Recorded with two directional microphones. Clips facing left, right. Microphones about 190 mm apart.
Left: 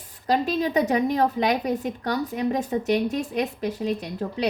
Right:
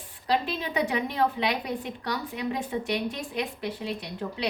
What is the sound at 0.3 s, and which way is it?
A woman's voice, 40° left (ahead or behind).